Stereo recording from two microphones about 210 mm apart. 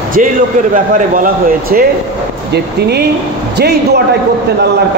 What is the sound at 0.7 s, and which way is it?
A man's voice, 40° right (ahead or behind).